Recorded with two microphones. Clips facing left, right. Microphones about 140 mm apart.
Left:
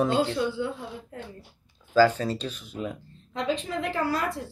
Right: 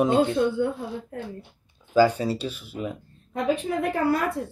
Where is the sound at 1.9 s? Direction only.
10° right (ahead or behind).